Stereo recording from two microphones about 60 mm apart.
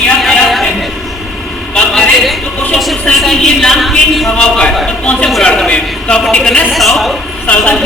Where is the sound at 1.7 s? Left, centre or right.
Centre.